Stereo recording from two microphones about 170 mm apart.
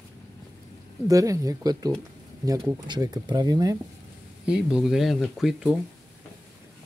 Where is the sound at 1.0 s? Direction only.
20° right (ahead or behind).